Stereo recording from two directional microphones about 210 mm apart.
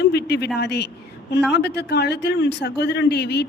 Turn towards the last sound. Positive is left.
turn(degrees=50)  # may be behind; listen again after turning